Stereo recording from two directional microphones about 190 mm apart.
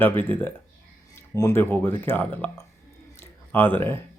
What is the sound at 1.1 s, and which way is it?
Speech, 15° left (ahead or behind).